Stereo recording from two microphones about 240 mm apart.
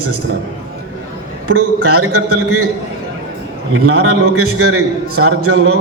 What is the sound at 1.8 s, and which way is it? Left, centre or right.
Speech, right.